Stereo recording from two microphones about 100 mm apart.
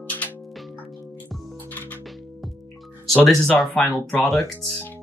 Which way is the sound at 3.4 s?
5° left (ahead or behind).